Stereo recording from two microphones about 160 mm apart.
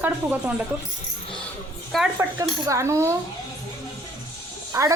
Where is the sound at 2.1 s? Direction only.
20° right (ahead or behind).